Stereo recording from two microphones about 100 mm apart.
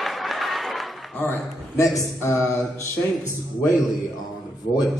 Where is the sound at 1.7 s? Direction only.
30° left (ahead or behind).